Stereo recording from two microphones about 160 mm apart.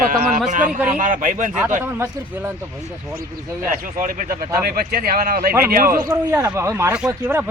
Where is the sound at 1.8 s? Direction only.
10° right (ahead or behind).